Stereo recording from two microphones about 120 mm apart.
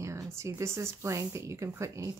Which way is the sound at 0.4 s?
20° right (ahead or behind).